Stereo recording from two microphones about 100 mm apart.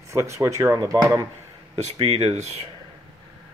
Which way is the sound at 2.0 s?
90° right.